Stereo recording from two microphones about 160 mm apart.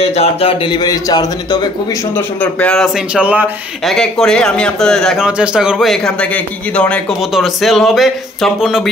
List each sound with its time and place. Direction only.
0.0 s a man's voice: 40° left (ahead or behind)
2.1 s a man's voice: 10° left (ahead or behind)
3.2 s speech: 10° right (ahead or behind)
3.9 s a man's voice: 5° left (ahead or behind)